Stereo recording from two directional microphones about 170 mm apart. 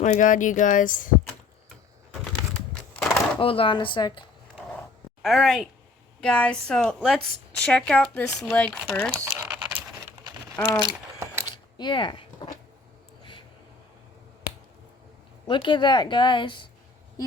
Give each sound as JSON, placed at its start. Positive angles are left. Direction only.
{"t": 0.0, "sound": "speech", "side_deg": 50}
{"t": 3.0, "sound": "a sound", "side_deg": 0}
{"t": 3.3, "sound": "speech", "side_deg": 30}
{"t": 5.2, "sound": "a woman's voice", "side_deg": 0}
{"t": 9.1, "sound": "patter", "side_deg": -10}
{"t": 10.6, "sound": "speech", "side_deg": 10}
{"t": 11.5, "sound": "a sound", "side_deg": 30}
{"t": 15.4, "sound": "speech", "side_deg": 25}